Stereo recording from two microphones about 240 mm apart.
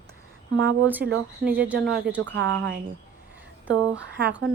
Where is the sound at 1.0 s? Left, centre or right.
Right.